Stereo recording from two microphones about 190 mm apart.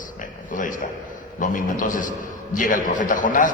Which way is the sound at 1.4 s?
45° left (ahead or behind).